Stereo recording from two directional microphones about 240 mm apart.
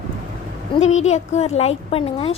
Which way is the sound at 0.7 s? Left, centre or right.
Left.